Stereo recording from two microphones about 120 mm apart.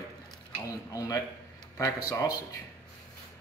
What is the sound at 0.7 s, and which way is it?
Speech, 30° left (ahead or behind).